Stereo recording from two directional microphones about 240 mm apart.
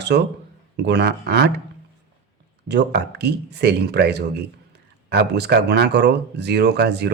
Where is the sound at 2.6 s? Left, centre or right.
Right.